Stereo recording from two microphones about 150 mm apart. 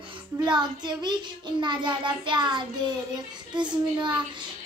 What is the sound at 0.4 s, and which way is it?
A child's voice, 30° right (ahead or behind).